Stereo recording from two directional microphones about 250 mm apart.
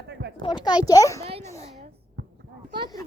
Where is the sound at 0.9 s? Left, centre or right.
Centre.